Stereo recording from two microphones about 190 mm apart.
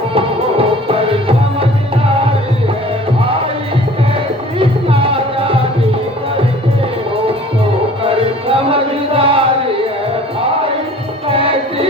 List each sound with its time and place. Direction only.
0.1 s music: 30° right (ahead or behind)
4.6 s music: 30° right (ahead or behind)
8.0 s music: 30° right (ahead or behind)
11.3 s music: 30° right (ahead or behind)